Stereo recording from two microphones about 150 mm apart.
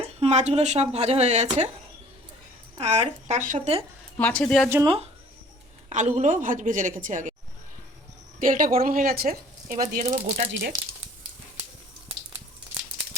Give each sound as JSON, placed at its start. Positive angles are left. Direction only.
{"t": 0.0, "sound": "speech", "side_deg": -45}
{"t": 2.8, "sound": "speech", "side_deg": -50}
{"t": 4.2, "sound": "speech", "side_deg": 10}
{"t": 5.9, "sound": "a woman's voice", "side_deg": -50}
{"t": 8.4, "sound": "a woman's voice", "side_deg": -65}
{"t": 10.0, "sound": "speech", "side_deg": -50}
{"t": 10.7, "sound": "speech", "side_deg": -25}